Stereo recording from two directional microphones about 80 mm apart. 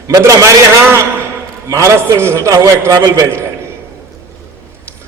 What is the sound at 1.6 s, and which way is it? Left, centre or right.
A man's voice, right.